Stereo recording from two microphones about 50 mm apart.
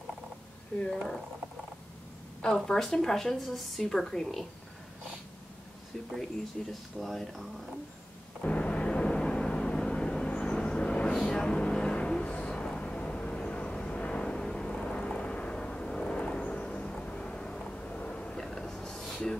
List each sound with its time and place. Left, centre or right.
0.8 s a woman's voice: centre
2.5 s a woman's voice: centre
6.7 s speech: centre
8.4 s a sound: left
12.4 s vehicle: centre
17.8 s a sound: left; by 19.3 s centre